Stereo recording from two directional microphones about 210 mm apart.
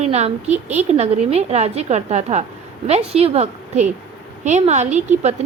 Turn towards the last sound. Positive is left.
turn(degrees=-35)  # may be behind; listen again after turning